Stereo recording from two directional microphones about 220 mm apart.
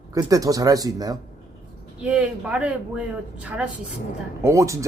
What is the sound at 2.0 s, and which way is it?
A man's voice, 5° right (ahead or behind).